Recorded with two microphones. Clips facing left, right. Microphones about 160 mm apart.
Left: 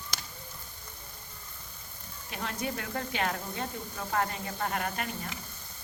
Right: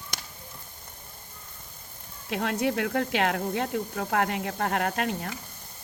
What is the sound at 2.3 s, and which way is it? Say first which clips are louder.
Speech: right 8 dB; 70° right (ahead or behind).